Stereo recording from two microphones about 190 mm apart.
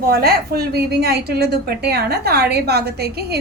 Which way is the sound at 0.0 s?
55° right (ahead or behind).